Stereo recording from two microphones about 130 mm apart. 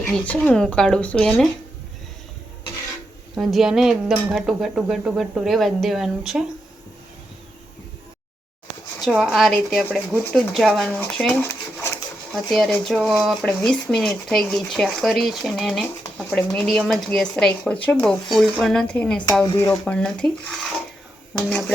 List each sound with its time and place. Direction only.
0.3 s speech: 5° left (ahead or behind)
3.3 s speech: 5° right (ahead or behind)
9.0 s speech: 5° right (ahead or behind); by 11.9 s 15° left (ahead or behind)
12.3 s speech: centre (ahead or behind)
19.5 s speech: 20° left (ahead or behind)
19.9 s speech: 5° left (ahead or behind)